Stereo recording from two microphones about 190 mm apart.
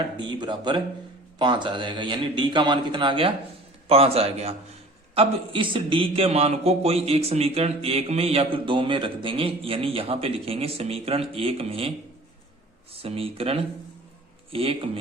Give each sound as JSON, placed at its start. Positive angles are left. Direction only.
{"t": 0.2, "sound": "a man's voice", "side_deg": -25}